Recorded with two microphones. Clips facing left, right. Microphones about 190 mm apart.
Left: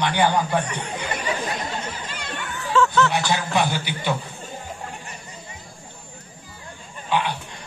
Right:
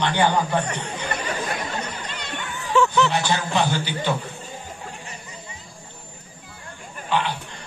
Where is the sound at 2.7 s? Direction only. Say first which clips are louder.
Even; 15° right (ahead or behind).